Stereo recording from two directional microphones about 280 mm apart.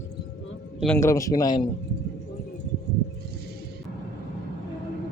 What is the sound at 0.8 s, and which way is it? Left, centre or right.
Speech, centre.